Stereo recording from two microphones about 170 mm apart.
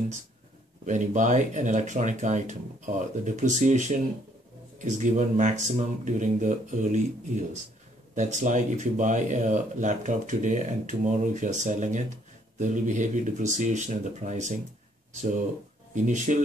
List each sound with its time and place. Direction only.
0.8 s speech: 45° right (ahead or behind)
8.1 s speech: 45° right (ahead or behind)
15.9 s speech: 45° right (ahead or behind)